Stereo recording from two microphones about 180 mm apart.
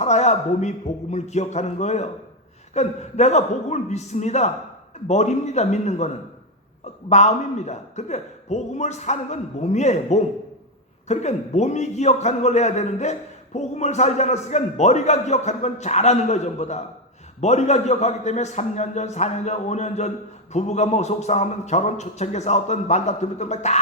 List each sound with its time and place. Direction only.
0.0 s a sound: 40° left (ahead or behind)
1.1 s a man's voice: 40° left (ahead or behind)
7.1 s a man's voice: 40° left (ahead or behind)